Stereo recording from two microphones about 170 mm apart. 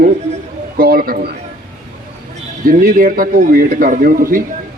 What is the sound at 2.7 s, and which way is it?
A man's voice, 55° right (ahead or behind).